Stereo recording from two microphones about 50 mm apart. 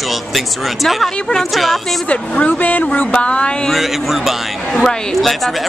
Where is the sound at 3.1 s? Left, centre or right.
Left.